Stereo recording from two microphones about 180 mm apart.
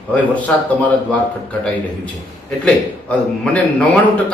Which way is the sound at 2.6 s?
5° left (ahead or behind).